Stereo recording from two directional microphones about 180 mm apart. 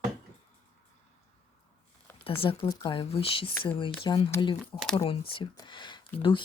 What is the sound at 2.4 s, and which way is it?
Speech, 25° left (ahead or behind).